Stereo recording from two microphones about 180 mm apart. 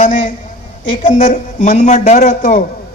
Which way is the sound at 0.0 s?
45° left (ahead or behind).